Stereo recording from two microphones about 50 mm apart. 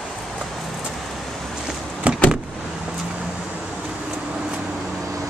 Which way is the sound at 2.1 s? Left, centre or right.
Right.